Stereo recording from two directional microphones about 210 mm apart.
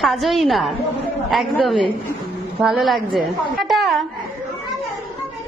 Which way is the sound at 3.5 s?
Centre (ahead or behind).